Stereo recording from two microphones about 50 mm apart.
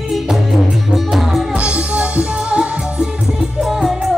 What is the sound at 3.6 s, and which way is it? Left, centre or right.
Music, centre.